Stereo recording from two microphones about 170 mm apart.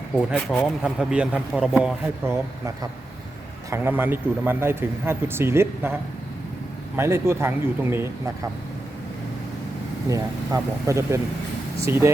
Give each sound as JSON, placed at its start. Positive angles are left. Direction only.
{"t": 0.2, "sound": "speech", "side_deg": 0}
{"t": 2.2, "sound": "speech", "side_deg": -15}
{"t": 10.1, "sound": "speech", "side_deg": -20}